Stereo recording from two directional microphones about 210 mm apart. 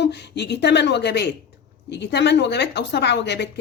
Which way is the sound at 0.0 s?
55° left (ahead or behind).